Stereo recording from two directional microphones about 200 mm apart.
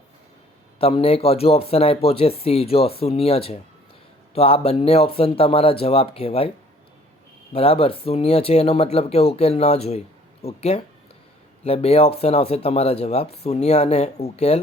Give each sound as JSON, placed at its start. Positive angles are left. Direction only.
{"t": 0.8, "sound": "speech", "side_deg": 30}
{"t": 7.5, "sound": "speech", "side_deg": 30}